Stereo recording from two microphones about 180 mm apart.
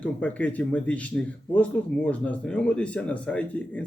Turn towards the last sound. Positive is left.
turn(degrees=5)  # may be behind; listen again after turning